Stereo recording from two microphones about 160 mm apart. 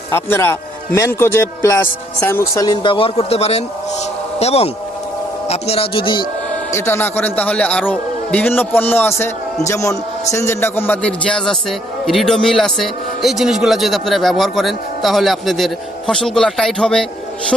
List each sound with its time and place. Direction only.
0.1 s a man's voice: 15° left (ahead or behind); by 6.2 s 30° left (ahead or behind)
6.7 s a man's voice: 15° left (ahead or behind)